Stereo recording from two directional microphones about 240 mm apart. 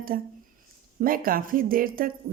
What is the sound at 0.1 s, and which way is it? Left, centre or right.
A woman's voice, right.